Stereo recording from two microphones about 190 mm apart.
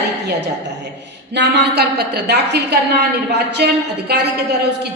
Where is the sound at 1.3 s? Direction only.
60° right (ahead or behind).